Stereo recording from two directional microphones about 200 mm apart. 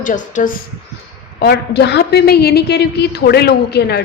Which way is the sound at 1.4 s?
55° left (ahead or behind).